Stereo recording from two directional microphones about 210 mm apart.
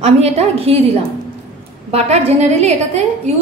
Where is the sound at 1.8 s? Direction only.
30° right (ahead or behind).